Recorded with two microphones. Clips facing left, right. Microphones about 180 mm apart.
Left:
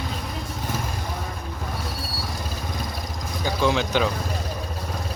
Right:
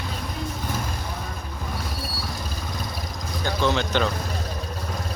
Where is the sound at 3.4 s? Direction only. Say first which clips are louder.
Left 1 dB; 5° left (ahead or behind).